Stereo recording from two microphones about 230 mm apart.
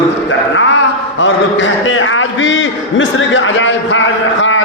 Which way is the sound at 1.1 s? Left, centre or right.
Left.